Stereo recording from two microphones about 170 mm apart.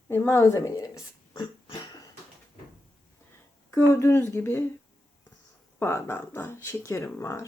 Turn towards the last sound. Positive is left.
turn(degrees=20)  # may be behind; listen again after turning